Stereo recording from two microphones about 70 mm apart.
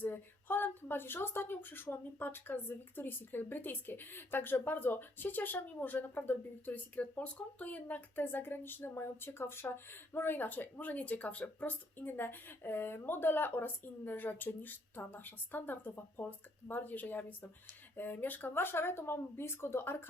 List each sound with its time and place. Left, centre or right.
0.0 s speech: left